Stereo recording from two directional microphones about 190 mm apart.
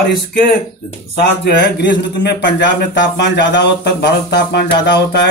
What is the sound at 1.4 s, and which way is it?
Speech, 65° left (ahead or behind).